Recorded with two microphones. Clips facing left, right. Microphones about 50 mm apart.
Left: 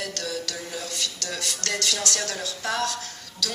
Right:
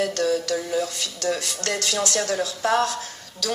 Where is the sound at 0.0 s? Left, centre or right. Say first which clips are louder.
Right 9 dB; right.